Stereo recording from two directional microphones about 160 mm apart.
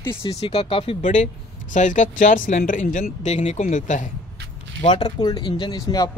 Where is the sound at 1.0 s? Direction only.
50° left (ahead or behind).